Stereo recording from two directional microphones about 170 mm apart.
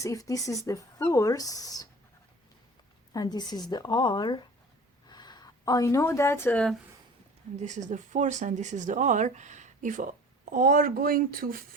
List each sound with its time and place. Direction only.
0.0 s speech: 20° left (ahead or behind)
3.1 s a woman's voice: 25° left (ahead or behind)
7.5 s speech: 45° right (ahead or behind)